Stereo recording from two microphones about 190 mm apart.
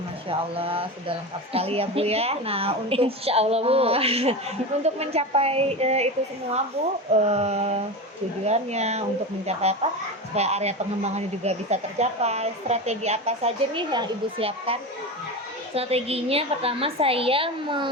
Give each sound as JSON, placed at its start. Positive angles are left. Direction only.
{"t": 0.3, "sound": "speech", "side_deg": -30}
{"t": 7.1, "sound": "speech", "side_deg": -35}